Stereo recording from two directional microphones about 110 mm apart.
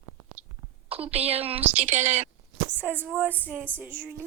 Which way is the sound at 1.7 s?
90° right.